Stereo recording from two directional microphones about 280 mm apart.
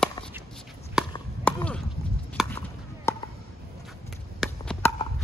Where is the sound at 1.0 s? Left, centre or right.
Centre.